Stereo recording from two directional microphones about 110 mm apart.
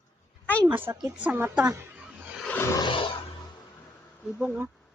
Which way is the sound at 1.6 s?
25° right (ahead or behind).